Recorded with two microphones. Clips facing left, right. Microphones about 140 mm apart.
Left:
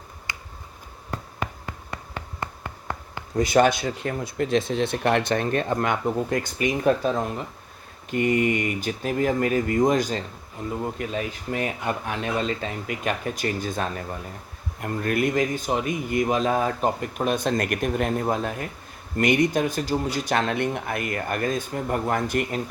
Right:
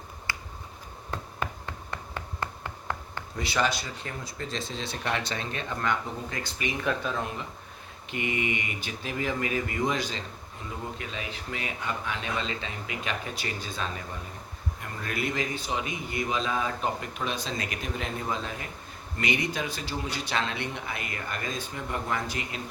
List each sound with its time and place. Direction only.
0.3 s finger snapping: 20° left (ahead or behind)
1.1 s a sound: 5° left (ahead or behind)
3.3 s speech: 45° left (ahead or behind)